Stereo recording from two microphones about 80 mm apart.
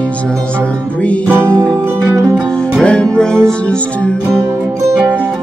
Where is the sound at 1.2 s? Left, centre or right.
Right.